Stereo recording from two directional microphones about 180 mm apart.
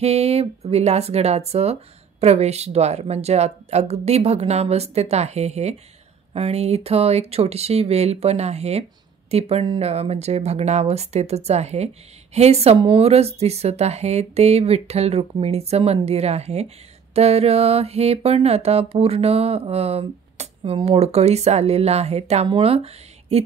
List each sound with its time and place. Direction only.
0.0 s speech: 35° right (ahead or behind)